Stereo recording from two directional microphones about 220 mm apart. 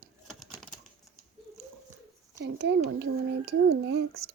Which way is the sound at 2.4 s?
50° right (ahead or behind).